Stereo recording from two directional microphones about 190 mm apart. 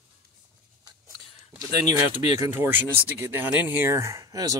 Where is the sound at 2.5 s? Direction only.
10° right (ahead or behind).